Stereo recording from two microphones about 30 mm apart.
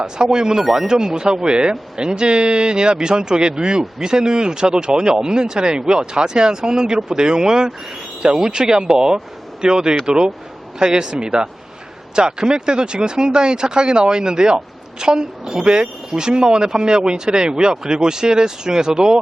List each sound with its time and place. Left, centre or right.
0.0 s speech: right
0.6 s speech: centre
0.9 s speech: right